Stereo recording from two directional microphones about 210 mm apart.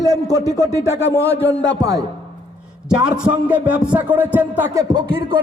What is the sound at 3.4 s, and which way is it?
Music, 5° right (ahead or behind).